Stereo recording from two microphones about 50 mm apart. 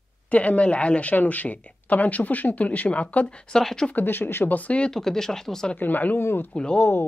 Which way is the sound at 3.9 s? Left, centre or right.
Left.